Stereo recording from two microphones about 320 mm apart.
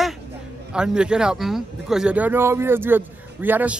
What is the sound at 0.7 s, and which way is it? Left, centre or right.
Speech, centre.